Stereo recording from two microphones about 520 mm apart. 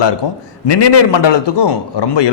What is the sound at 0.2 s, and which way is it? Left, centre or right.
A man's voice, left.